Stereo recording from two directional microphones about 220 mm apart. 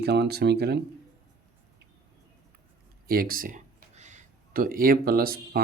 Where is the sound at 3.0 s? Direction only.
40° right (ahead or behind).